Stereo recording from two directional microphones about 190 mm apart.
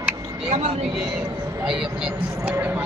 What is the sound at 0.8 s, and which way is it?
A woman's voice, 5° right (ahead or behind).